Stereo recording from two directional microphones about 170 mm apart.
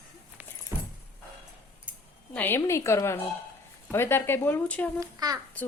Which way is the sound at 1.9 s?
10° right (ahead or behind).